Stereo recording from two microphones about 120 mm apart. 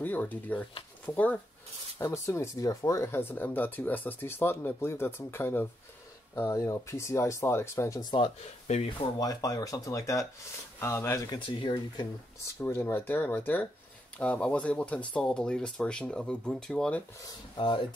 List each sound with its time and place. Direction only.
0.0 s speech: 15° left (ahead or behind)
8.2 s speech: 70° left (ahead or behind)
9.2 s speech: 30° left (ahead or behind)
11.2 s speech: 45° left (ahead or behind)
12.4 s speech: 20° left (ahead or behind)